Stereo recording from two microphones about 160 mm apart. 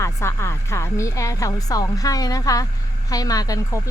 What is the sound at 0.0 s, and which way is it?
Speech, 15° left (ahead or behind).